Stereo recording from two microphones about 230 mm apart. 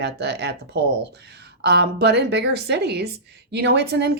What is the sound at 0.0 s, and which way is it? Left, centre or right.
Speech, right.